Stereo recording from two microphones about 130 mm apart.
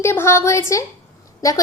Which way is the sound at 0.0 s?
20° left (ahead or behind).